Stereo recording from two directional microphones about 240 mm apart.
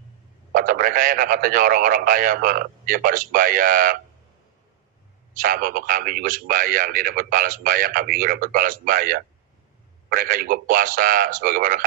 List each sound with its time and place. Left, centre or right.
0.5 s a man's voice: right
5.3 s a man's voice: right